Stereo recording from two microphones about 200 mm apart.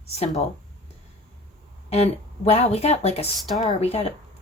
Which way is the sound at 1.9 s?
30° left (ahead or behind).